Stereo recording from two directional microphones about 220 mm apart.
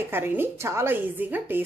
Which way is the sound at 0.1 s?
10° right (ahead or behind).